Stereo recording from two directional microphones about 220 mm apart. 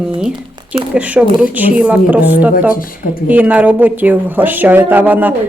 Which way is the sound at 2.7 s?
40° left (ahead or behind).